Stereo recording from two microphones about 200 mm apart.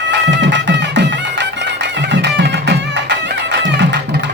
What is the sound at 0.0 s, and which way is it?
Music, 60° right (ahead or behind).